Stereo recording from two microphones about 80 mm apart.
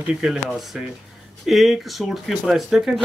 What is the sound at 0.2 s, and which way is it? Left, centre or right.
Speech, centre.